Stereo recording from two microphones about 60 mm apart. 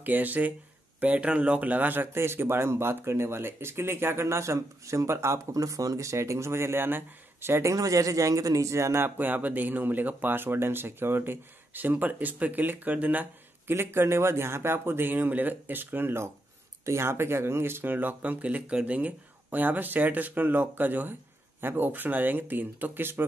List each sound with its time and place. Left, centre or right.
0.0 s speech: right
2.1 s speech: right
7.6 s speech: right
9.0 s speech: right
13.7 s speech: right
16.8 s speech: right